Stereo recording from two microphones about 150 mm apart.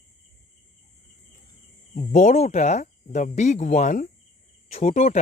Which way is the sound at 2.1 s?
55° left (ahead or behind).